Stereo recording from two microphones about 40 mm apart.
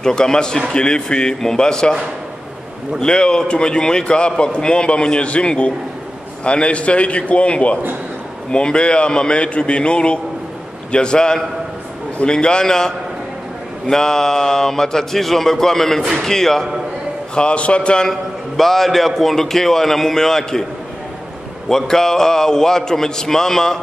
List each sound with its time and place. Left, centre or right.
0.0 s a man's voice: centre
3.0 s a man's voice: left
17.4 s a man's voice: left
18.6 s speech: centre
21.6 s speech: centre